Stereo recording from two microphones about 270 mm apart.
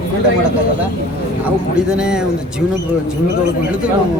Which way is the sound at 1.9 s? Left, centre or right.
Centre.